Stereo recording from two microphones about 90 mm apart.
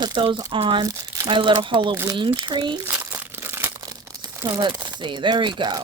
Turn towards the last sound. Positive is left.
turn(degrees=-60)  # may be behind; listen again after turning